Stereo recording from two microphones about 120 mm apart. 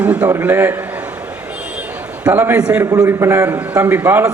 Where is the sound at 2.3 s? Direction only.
20° right (ahead or behind).